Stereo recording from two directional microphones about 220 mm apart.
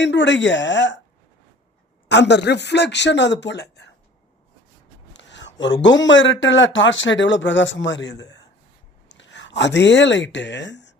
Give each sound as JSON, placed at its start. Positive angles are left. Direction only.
{"t": 0.0, "sound": "speech", "side_deg": 55}
{"t": 2.0, "sound": "speech", "side_deg": 50}
{"t": 5.1, "sound": "a sound", "side_deg": 55}
{"t": 5.8, "sound": "speech", "side_deg": 55}